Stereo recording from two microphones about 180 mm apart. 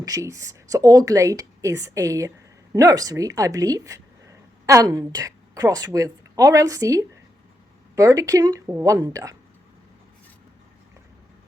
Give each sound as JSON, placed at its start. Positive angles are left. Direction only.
{"t": 0.0, "sound": "a woman's voice", "side_deg": -20}